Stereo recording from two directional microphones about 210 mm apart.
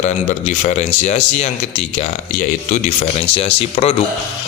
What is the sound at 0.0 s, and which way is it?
A man's voice, 35° left (ahead or behind).